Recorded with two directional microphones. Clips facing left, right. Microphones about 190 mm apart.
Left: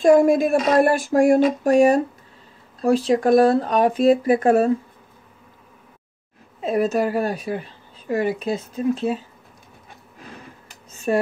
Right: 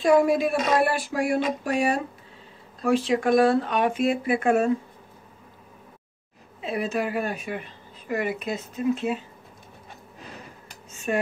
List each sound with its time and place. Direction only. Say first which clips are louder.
0.0 s speech: left 5 dB; 45° left (ahead or behind)
6.6 s speech: left 7 dB; 45° left (ahead or behind)
10.9 s cutlery: left 6 dB; 35° left (ahead or behind)